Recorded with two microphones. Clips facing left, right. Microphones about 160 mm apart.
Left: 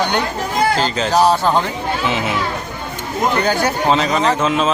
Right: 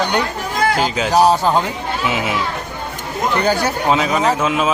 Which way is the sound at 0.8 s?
10° right (ahead or behind).